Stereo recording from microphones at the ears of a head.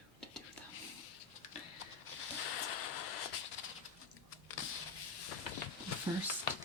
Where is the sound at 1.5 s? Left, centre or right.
Left.